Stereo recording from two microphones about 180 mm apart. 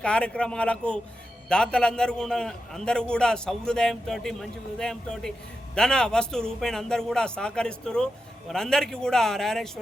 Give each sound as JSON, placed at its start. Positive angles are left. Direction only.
{"t": 0.0, "sound": "a man's voice", "side_deg": 5}